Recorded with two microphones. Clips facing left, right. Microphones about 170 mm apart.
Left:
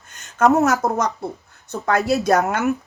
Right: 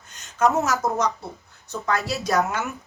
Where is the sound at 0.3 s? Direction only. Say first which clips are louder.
Left 5 dB; 55° left (ahead or behind).